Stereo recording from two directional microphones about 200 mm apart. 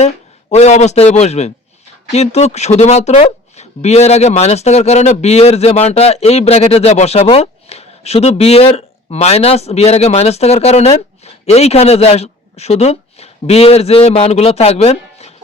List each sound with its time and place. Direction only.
0.5 s speech: 35° left (ahead or behind)